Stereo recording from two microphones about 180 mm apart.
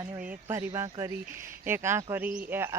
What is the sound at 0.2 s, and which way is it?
Speech, 10° right (ahead or behind).